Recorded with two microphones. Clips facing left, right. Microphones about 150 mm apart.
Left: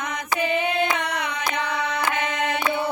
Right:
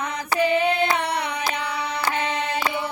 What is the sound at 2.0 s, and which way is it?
Music, 30° right (ahead or behind).